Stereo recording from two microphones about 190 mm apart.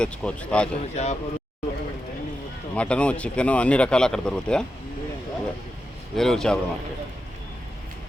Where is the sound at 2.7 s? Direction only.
5° left (ahead or behind).